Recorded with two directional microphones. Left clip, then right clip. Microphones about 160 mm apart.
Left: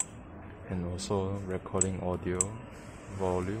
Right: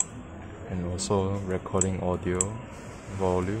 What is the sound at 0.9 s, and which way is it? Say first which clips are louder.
A man's voice: right 6 dB; 15° right (ahead or behind).